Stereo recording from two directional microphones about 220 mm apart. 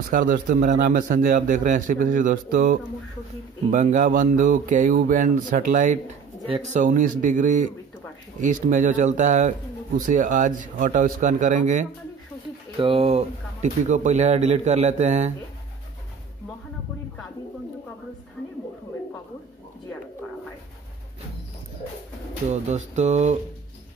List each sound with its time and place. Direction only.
0.1 s a man's voice: 40° right (ahead or behind)
22.5 s a man's voice: 30° right (ahead or behind)